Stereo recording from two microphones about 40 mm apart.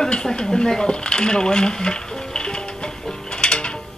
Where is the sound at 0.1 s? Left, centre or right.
Centre.